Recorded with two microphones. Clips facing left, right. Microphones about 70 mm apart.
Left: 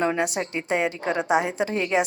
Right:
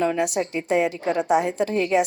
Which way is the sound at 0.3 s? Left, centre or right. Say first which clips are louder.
Right 3 dB; left.